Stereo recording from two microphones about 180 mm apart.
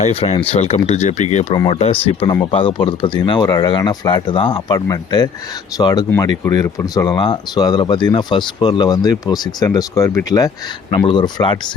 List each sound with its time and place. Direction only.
0.0 s speech: 35° left (ahead or behind)